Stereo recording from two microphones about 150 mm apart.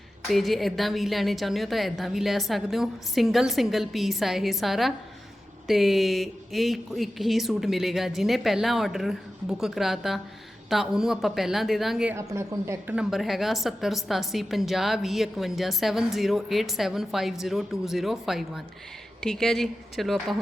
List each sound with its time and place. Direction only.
0.3 s a woman's voice: centre (ahead or behind)
12.1 s speech: 20° right (ahead or behind)
13.0 s a woman's voice: centre (ahead or behind)